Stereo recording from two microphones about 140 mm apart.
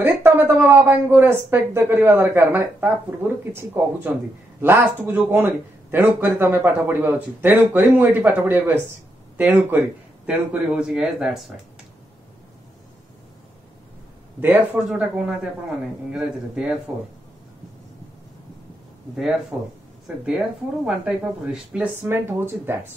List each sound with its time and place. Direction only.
0.0 s a man's voice: 15° right (ahead or behind)
14.4 s a man's voice: 15° right (ahead or behind)
19.5 s a man's voice: 5° right (ahead or behind)